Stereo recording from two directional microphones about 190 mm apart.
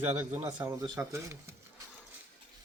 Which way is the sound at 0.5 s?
10° right (ahead or behind).